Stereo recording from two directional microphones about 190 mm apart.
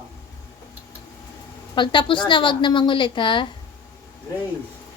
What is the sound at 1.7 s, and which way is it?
A woman's voice, 25° left (ahead or behind).